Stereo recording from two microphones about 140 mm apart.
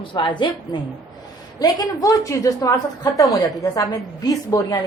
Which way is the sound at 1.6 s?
25° left (ahead or behind).